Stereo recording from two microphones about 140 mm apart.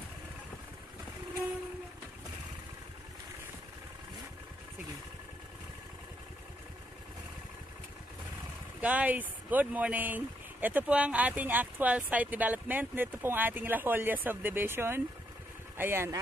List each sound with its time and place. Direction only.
8.8 s speech: 10° right (ahead or behind)